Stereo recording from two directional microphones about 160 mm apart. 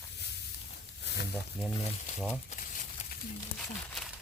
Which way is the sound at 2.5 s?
55° left (ahead or behind).